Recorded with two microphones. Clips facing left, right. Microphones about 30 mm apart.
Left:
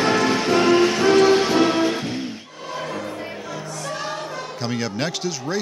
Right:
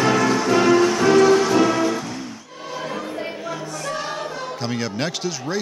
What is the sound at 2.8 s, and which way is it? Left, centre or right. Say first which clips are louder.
Music: right 1 dB; centre.